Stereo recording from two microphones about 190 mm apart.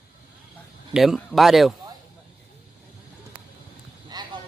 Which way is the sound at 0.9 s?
Centre (ahead or behind).